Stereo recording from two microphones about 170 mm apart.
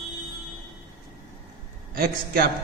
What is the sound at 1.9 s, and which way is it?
Speech, 65° right (ahead or behind).